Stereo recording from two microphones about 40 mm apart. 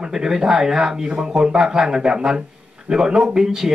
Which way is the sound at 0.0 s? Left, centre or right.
Centre.